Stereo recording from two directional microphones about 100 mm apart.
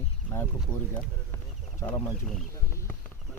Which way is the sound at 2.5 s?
30° left (ahead or behind).